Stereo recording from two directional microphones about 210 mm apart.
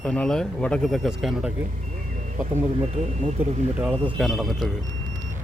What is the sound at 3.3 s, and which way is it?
Speech, 5° right (ahead or behind).